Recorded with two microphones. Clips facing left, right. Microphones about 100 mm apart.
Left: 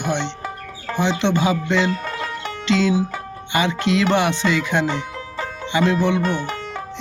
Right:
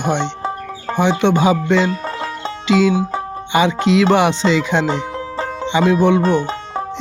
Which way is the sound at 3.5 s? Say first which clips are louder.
Right 5 dB; 15° right (ahead or behind).